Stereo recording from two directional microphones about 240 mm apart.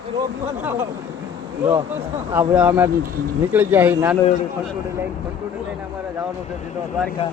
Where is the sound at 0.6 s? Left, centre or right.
Centre.